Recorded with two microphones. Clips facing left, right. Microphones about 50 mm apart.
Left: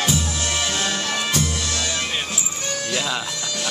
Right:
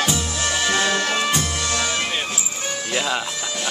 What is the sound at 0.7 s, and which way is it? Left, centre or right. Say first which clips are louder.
Music: right 4 dB; right.